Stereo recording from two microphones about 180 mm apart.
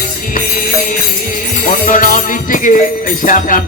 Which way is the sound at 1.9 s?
50° left (ahead or behind).